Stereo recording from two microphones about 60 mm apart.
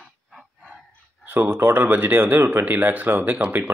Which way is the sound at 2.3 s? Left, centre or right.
Right.